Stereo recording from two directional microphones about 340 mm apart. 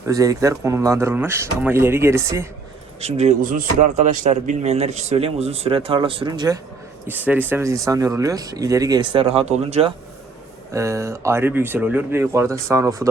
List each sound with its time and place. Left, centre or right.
0.1 s speech: centre
3.0 s speech: centre